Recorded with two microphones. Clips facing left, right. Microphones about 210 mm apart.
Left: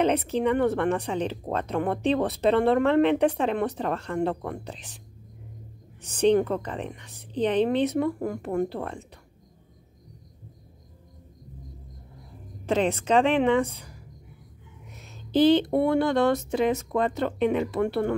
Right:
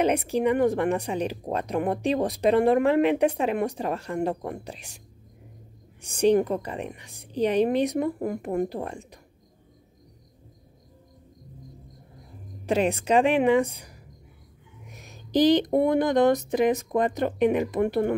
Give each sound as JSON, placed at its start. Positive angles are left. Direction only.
{"t": 0.0, "sound": "speech", "side_deg": -10}
{"t": 6.0, "sound": "speech", "side_deg": -10}
{"t": 12.6, "sound": "speech", "side_deg": -10}